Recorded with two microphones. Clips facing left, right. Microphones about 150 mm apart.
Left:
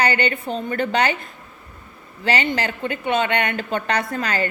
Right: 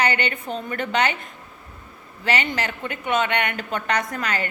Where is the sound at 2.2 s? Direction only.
30° left (ahead or behind).